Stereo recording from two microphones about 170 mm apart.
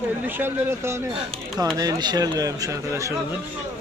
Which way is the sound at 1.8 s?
25° right (ahead or behind).